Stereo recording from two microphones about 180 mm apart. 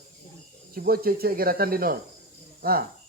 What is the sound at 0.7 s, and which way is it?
Speech, 55° right (ahead or behind).